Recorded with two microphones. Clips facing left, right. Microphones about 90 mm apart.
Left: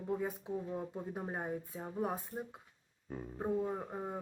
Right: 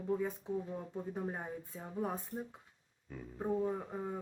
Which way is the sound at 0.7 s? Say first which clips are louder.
Even; 20° left (ahead or behind).